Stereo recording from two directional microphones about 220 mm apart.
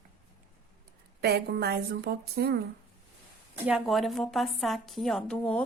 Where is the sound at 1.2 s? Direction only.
45° right (ahead or behind).